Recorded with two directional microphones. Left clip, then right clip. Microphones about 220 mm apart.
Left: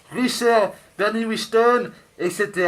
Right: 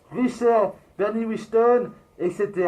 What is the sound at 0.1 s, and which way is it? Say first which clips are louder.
Speech: left 2 dB; 15° left (ahead or behind).